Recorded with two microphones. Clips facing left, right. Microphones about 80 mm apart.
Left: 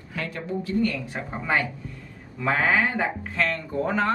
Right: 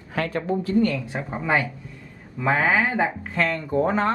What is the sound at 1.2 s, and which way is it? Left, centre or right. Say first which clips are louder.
Speech: right 2 dB; centre.